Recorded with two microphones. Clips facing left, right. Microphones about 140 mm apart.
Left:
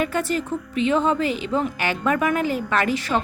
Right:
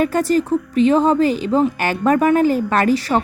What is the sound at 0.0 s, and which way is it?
Speech, 40° right (ahead or behind).